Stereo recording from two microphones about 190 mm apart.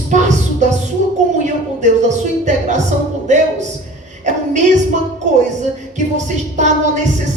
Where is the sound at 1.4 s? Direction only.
40° right (ahead or behind).